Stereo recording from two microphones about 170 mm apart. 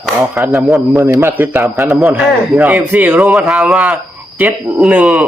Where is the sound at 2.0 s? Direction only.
5° right (ahead or behind).